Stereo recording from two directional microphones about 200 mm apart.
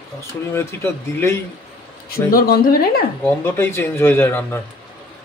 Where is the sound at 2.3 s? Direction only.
45° left (ahead or behind).